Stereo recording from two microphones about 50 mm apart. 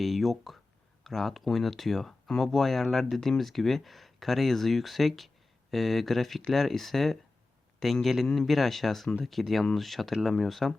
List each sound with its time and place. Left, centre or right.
0.0 s a man's voice: centre